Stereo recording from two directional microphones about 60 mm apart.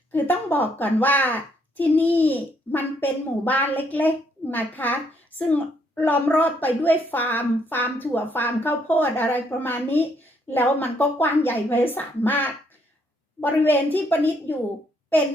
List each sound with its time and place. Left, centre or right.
0.1 s a woman's voice: left